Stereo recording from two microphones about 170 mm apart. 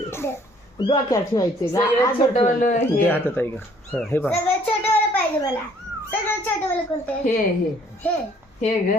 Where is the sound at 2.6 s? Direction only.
50° left (ahead or behind).